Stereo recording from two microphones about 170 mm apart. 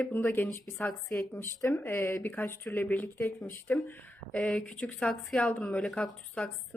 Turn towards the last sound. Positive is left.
turn(degrees=5)  # may be behind; listen again after turning